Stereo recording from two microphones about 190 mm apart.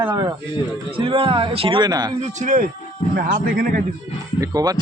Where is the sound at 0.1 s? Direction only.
20° right (ahead or behind).